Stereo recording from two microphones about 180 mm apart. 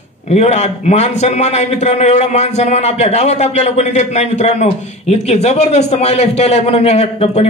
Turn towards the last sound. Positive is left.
turn(degrees=35)  # may be behind; listen again after turning